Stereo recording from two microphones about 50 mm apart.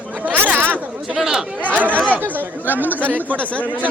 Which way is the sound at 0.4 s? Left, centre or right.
Right.